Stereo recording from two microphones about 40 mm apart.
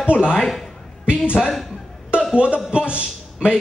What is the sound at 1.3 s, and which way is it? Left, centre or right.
Speech, centre.